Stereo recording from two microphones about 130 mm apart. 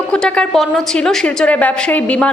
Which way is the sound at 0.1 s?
5° left (ahead or behind).